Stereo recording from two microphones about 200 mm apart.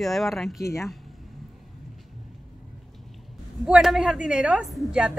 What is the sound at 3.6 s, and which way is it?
Speech, centre (ahead or behind).